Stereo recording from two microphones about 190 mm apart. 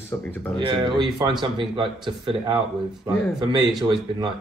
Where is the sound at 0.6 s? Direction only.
25° right (ahead or behind).